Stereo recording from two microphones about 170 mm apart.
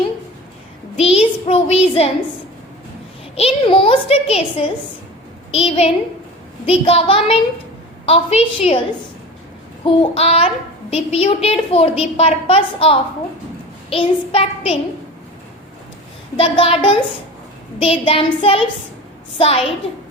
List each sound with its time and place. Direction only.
0.9 s a woman's voice: 35° left (ahead or behind)
3.3 s a woman's voice: 30° left (ahead or behind)
9.8 s a woman's voice: 35° left (ahead or behind)
16.4 s a woman's voice: 35° left (ahead or behind)